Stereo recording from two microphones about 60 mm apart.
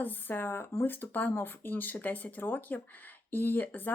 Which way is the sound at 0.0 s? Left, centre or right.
Left.